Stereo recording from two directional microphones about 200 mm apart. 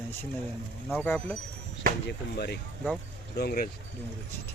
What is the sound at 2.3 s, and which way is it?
Speech, 50° left (ahead or behind).